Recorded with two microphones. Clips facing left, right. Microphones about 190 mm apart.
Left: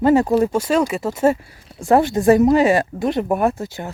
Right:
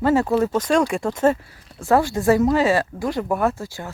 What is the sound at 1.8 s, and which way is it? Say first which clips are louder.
Speech: left 3 dB; 20° left (ahead or behind).